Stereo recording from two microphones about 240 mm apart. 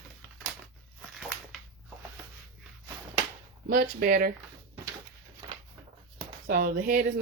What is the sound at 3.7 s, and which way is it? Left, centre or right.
Speech, right.